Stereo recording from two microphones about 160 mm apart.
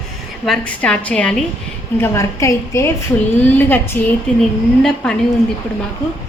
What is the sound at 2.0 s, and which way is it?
Speech, 20° left (ahead or behind).